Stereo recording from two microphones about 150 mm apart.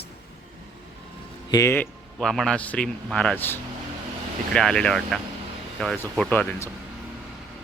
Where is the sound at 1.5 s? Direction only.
20° left (ahead or behind).